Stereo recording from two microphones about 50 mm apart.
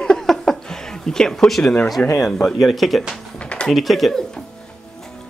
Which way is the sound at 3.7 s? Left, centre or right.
Centre.